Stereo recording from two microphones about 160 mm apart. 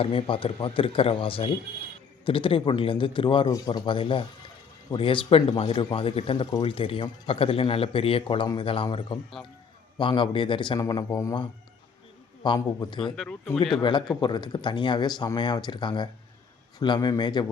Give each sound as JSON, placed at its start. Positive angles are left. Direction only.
{"t": 0.0, "sound": "speech", "side_deg": 35}
{"t": 13.1, "sound": "speech", "side_deg": 0}
{"t": 14.2, "sound": "speech", "side_deg": 25}